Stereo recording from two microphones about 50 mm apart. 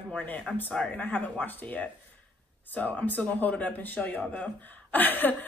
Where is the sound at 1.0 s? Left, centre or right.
Left.